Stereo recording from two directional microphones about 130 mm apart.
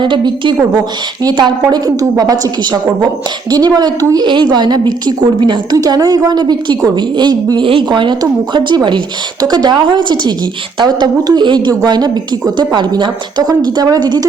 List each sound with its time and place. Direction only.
0.0 s a woman's voice: 40° right (ahead or behind)